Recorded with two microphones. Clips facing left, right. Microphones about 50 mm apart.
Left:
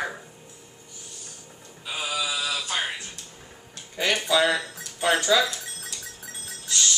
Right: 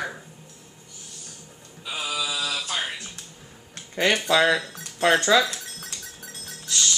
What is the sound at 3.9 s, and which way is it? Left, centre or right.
Speech, right.